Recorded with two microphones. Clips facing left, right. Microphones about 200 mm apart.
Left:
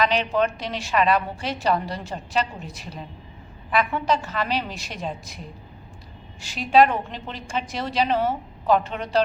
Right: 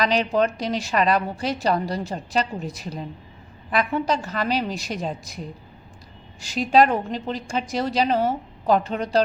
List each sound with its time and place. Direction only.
0.0 s a woman's voice: 40° right (ahead or behind)
6.4 s a woman's voice: 40° right (ahead or behind)